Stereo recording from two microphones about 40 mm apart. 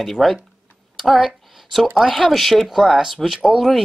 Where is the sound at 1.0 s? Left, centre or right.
Centre.